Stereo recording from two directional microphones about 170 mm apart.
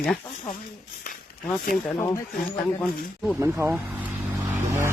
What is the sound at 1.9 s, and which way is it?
Speech, 20° left (ahead or behind).